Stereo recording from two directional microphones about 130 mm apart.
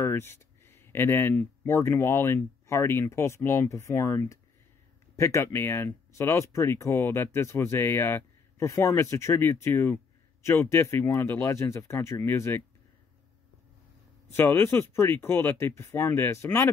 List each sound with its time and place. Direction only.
0.0 s a sound: 20° left (ahead or behind)
1.8 s speech: 20° left (ahead or behind)
14.3 s speech: 15° left (ahead or behind)